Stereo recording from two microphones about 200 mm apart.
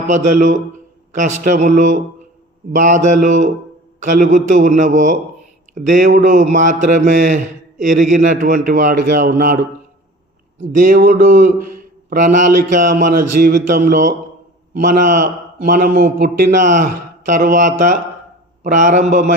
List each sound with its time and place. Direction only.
0.1 s a man's voice: 40° right (ahead or behind)
10.8 s a man's voice: 40° right (ahead or behind)